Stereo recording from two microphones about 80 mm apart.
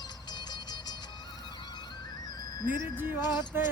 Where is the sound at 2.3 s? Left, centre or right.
Left.